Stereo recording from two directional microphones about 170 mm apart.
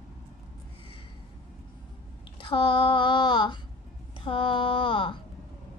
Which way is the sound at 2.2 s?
30° left (ahead or behind).